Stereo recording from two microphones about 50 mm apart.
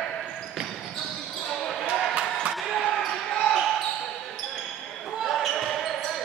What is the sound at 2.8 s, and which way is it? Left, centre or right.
Basketball bounce, centre.